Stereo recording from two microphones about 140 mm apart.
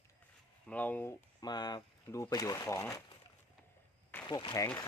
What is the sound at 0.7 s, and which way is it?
Speech, 10° left (ahead or behind).